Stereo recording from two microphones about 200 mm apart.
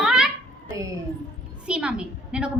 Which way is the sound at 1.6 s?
5° right (ahead or behind).